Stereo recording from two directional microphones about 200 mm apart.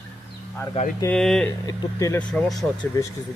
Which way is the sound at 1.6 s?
15° left (ahead or behind).